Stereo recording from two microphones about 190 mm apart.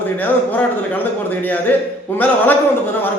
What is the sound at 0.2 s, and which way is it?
A man's voice, 10° left (ahead or behind).